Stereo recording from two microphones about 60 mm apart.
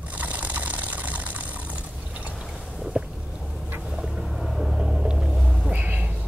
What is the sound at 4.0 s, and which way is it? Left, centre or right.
Boat, centre.